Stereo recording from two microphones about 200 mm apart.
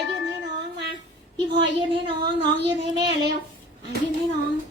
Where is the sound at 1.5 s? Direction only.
25° right (ahead or behind).